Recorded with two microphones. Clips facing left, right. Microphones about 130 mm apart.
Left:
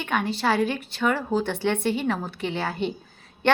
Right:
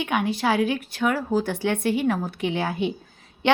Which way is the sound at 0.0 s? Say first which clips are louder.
Right 2 dB; 10° right (ahead or behind).